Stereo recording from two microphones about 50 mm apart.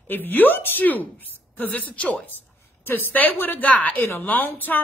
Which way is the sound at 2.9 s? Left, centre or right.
Left.